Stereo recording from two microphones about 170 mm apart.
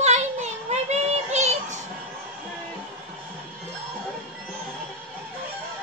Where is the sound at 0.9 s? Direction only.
40° right (ahead or behind).